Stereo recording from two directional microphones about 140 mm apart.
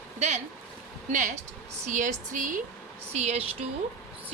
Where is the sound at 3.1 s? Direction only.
50° right (ahead or behind).